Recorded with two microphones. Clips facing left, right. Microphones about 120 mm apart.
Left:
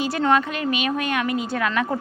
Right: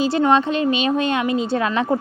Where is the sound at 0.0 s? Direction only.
25° right (ahead or behind).